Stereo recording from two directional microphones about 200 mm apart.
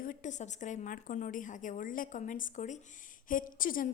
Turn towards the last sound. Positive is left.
turn(degrees=45)  # may be behind; listen again after turning